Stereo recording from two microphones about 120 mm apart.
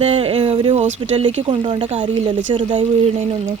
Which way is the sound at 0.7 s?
65° right (ahead or behind).